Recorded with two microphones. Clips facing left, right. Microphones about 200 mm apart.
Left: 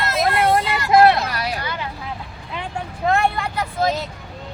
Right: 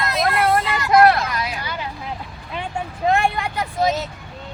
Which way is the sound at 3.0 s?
15° right (ahead or behind).